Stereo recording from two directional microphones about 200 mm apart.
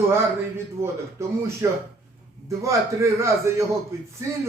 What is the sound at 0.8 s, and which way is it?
A man's voice, 15° right (ahead or behind).